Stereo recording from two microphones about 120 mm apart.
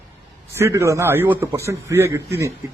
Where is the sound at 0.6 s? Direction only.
25° right (ahead or behind).